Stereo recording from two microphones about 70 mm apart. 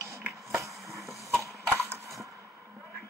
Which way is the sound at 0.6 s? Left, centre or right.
Right.